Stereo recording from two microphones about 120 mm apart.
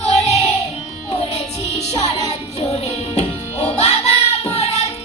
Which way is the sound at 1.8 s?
60° left (ahead or behind).